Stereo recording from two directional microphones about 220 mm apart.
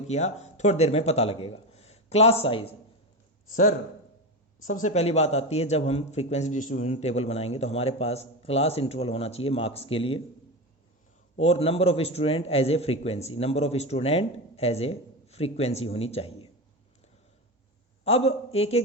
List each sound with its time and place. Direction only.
0.1 s speech: 30° left (ahead or behind)
3.5 s a man's voice: 40° left (ahead or behind)
11.3 s speech: 25° left (ahead or behind)
18.0 s a man's voice: 30° left (ahead or behind)